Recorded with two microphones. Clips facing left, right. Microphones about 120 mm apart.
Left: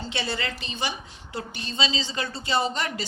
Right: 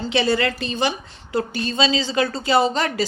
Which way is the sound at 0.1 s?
90° right.